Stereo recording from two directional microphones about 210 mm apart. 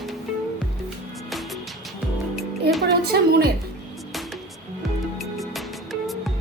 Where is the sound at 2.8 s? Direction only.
50° right (ahead or behind).